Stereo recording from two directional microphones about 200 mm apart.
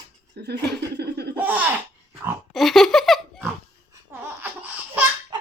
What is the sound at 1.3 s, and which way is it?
Speech, 10° right (ahead or behind).